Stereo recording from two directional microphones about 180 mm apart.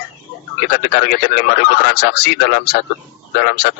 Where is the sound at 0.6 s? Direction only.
65° left (ahead or behind).